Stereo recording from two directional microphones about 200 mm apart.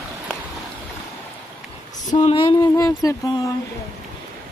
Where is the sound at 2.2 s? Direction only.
25° left (ahead or behind).